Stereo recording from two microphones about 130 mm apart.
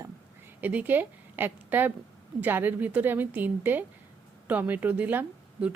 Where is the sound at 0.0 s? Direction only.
15° right (ahead or behind).